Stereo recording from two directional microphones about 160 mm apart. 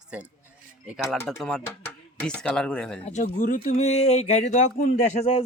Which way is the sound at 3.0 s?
45° left (ahead or behind).